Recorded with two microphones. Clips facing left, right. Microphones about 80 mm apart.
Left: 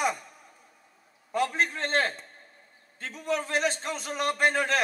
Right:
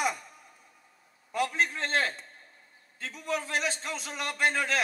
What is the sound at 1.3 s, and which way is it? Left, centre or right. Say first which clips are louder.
A man's voice: left 2 dB; left.